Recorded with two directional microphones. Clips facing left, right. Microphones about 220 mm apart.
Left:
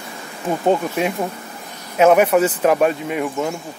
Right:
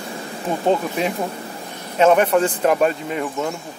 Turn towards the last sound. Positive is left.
turn(degrees=5)  # may be behind; listen again after turning